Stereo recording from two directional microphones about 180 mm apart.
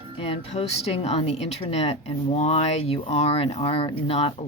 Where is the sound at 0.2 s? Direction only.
35° left (ahead or behind).